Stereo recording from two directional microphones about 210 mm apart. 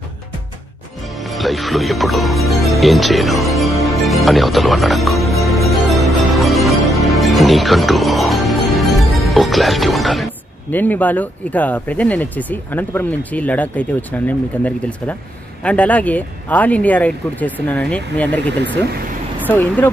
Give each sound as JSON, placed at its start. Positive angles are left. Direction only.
{"t": 1.2, "sound": "speech", "side_deg": 0}
{"t": 3.8, "sound": "music", "side_deg": 0}
{"t": 6.3, "sound": "speech", "side_deg": 0}
{"t": 18.6, "sound": "speech", "side_deg": -55}
{"t": 19.4, "sound": "speech", "side_deg": 10}